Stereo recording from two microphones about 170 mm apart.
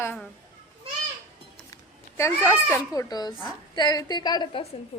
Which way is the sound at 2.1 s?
15° left (ahead or behind).